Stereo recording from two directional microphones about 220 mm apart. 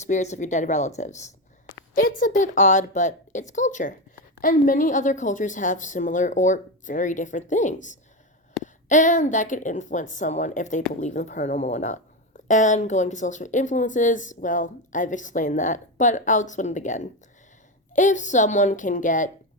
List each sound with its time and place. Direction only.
0.0 s a woman's voice: 30° left (ahead or behind)